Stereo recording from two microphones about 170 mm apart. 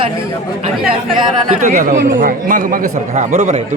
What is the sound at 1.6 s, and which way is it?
A man's voice, 45° right (ahead or behind).